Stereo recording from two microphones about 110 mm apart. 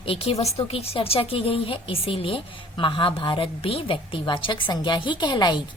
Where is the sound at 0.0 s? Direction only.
60° left (ahead or behind).